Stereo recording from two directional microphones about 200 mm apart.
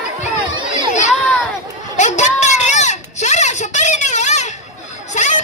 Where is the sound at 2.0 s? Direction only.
35° left (ahead or behind).